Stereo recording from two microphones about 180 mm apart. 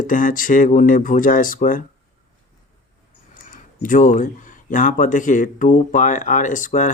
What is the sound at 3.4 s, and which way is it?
Speech, 45° left (ahead or behind).